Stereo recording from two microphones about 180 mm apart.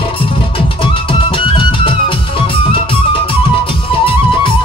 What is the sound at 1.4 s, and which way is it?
Music, 30° left (ahead or behind).